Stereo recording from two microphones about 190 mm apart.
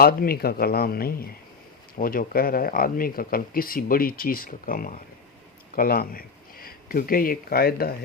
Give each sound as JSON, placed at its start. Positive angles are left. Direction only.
{"t": 0.0, "sound": "speech", "side_deg": 50}